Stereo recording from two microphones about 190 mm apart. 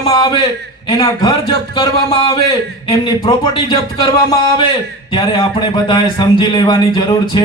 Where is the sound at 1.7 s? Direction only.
25° left (ahead or behind).